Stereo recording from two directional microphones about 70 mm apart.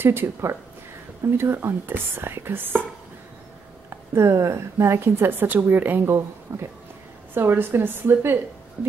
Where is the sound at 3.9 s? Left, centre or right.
Right.